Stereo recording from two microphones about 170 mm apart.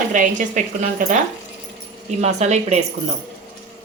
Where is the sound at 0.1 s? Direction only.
50° right (ahead or behind).